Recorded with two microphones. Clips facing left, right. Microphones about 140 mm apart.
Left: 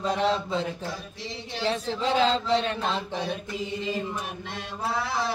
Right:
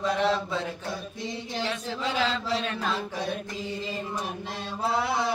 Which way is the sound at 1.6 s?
35° left (ahead or behind).